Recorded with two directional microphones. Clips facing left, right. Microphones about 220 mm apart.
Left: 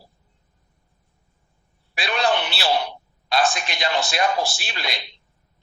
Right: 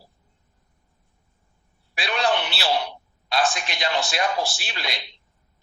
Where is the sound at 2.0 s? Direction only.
50° left (ahead or behind).